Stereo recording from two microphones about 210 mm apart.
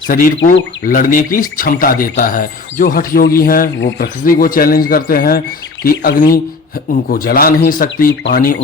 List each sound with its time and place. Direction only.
0.1 s speech: 40° left (ahead or behind)